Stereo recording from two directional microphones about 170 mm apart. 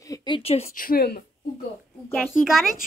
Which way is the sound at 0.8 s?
60° left (ahead or behind).